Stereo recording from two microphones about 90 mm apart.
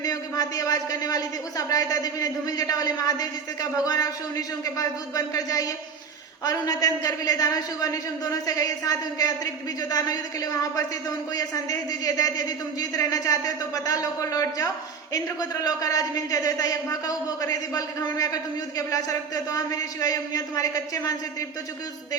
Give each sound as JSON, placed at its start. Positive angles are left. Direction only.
{"t": 0.0, "sound": "a woman's voice", "side_deg": 45}